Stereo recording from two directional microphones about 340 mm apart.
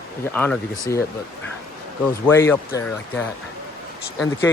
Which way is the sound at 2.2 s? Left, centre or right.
Centre.